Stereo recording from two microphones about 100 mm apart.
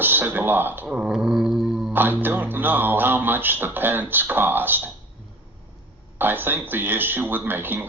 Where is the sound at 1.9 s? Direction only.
20° right (ahead or behind).